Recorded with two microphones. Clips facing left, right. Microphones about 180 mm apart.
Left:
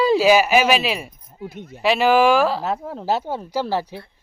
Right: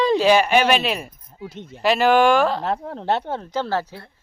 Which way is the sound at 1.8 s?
Centre (ahead or behind).